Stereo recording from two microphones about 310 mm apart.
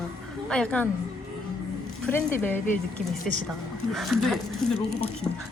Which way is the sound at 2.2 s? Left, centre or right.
Centre.